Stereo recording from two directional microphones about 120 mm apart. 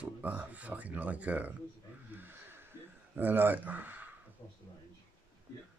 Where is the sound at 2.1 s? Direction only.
20° right (ahead or behind).